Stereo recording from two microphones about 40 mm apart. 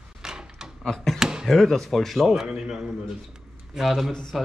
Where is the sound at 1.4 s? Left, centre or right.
Centre.